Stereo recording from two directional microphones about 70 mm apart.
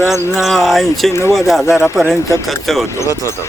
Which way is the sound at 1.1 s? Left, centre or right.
Left.